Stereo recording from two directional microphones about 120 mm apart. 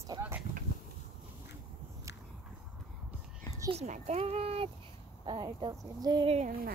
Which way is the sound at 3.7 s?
80° right.